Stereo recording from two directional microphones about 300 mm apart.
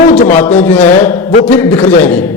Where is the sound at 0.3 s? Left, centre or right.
Centre.